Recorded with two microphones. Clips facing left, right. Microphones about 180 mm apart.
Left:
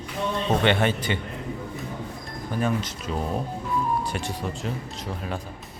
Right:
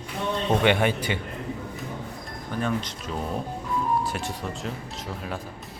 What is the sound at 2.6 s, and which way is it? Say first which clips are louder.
Speech: left 2 dB; 5° left (ahead or behind).